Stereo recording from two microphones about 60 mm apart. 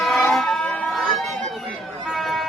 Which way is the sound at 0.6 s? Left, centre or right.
Centre.